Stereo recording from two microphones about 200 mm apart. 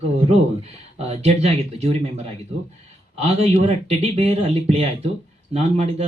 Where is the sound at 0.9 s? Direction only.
30° right (ahead or behind).